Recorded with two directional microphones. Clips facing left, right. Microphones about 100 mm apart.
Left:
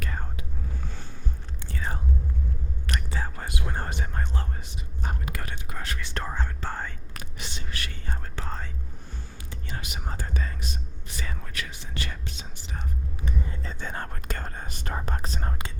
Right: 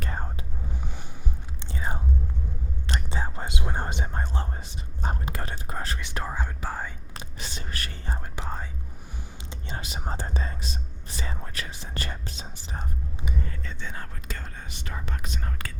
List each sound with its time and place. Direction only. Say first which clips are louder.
0.0 s whispering: right 2 dB; 30° right (ahead or behind)
0.8 s a sound: right 1 dB; 15° right (ahead or behind)
1.6 s chewing: right 1 dB; 20° right (ahead or behind)
2.8 s whispering: right 1 dB; 25° right (ahead or behind)
6.0 s speech: even; 10° right (ahead or behind)
7.1 s speech: right 1 dB; 30° right (ahead or behind)
8.2 s speech: right 1 dB; 15° right (ahead or behind)
9.5 s speech: right 1 dB; 25° right (ahead or behind)
13.5 s whispering: left 2 dB; 35° left (ahead or behind)
13.7 s speech: left 3 dB; 50° left (ahead or behind)